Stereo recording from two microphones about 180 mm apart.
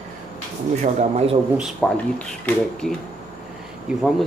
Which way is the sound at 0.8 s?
35° right (ahead or behind).